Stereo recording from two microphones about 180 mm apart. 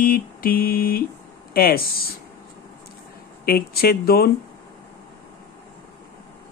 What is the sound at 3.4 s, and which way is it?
Speech, 60° left (ahead or behind).